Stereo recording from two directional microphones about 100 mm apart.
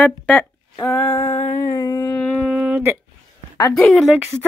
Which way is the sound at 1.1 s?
25° left (ahead or behind).